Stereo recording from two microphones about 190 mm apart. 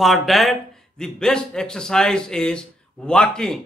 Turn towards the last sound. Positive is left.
turn(degrees=5)  # may be behind; listen again after turning